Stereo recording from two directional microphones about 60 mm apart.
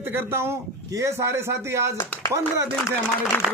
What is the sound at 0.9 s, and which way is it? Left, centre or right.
Speech, right.